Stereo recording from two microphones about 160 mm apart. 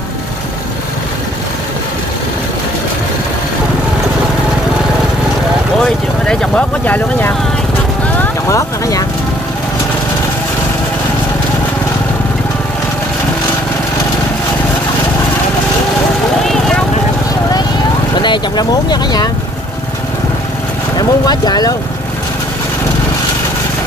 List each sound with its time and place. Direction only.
6.2 s speech: 5° left (ahead or behind)
16.4 s vehicle: 5° left (ahead or behind)
18.2 s speech: 25° left (ahead or behind)
21.0 s speech: 25° left (ahead or behind)